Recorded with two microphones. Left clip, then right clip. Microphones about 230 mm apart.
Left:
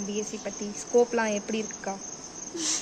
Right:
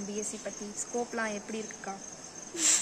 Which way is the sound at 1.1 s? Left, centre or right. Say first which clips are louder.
Left 7 dB; centre.